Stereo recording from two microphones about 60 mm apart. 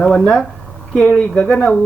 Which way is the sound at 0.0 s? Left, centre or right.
Centre.